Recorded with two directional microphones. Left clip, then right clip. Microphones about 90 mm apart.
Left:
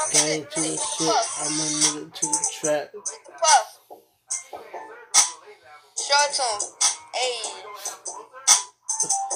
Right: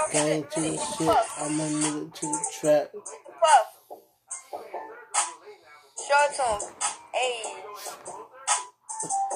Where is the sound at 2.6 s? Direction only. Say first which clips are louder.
Right 3 dB; 25° right (ahead or behind).